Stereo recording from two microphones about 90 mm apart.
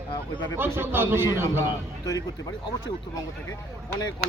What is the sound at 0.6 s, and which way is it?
Speech, 25° right (ahead or behind).